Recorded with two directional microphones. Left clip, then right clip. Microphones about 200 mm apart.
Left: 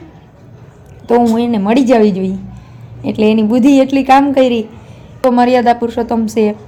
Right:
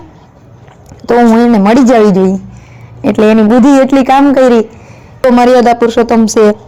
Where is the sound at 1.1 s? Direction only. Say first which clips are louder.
Right 5 dB; 35° right (ahead or behind).